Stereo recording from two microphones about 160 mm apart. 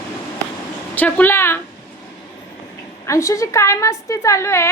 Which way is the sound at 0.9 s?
10° left (ahead or behind).